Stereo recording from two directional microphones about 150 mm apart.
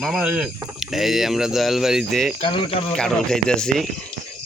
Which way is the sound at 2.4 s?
35° left (ahead or behind).